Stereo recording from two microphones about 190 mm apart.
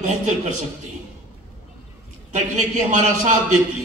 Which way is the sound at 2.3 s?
40° right (ahead or behind).